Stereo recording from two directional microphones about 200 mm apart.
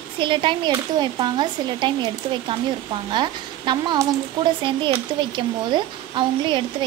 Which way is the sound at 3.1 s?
20° right (ahead or behind).